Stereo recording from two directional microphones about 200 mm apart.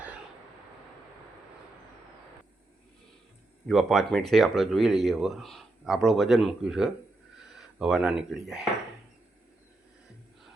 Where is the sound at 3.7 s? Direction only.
Centre (ahead or behind).